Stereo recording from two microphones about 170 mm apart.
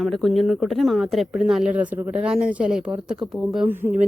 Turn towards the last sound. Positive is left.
turn(degrees=-10)  # may be behind; listen again after turning